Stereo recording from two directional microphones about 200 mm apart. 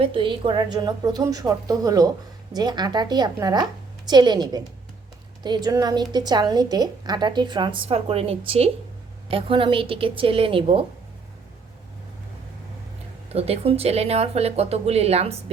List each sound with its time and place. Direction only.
0.0 s a woman's voice: 25° right (ahead or behind)
13.3 s speech: 30° right (ahead or behind)